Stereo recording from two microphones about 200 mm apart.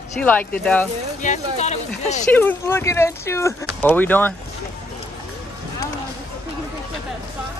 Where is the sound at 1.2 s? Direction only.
35° left (ahead or behind).